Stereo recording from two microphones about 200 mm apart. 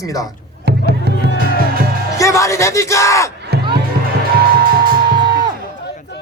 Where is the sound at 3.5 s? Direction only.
55° right (ahead or behind).